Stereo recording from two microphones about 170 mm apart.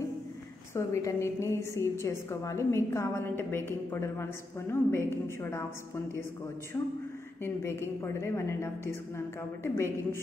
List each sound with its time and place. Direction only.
0.7 s a woman's voice: 15° left (ahead or behind)